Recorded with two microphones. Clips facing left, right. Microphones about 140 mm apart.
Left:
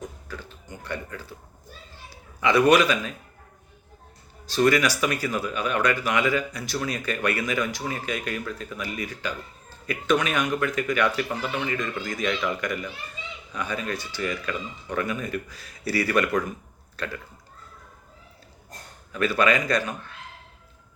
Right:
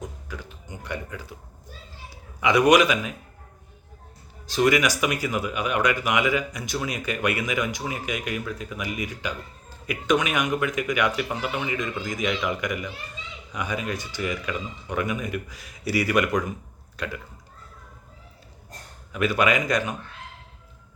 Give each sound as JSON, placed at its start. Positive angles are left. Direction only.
{"t": 0.0, "sound": "a sound", "side_deg": -15}
{"t": 2.4, "sound": "speech", "side_deg": -15}
{"t": 4.4, "sound": "speech", "side_deg": -15}
{"t": 19.1, "sound": "speech", "side_deg": -15}